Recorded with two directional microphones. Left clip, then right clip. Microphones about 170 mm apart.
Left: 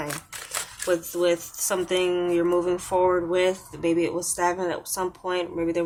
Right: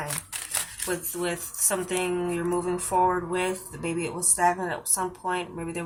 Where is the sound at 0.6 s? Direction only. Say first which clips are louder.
Left 10 dB; 35° left (ahead or behind).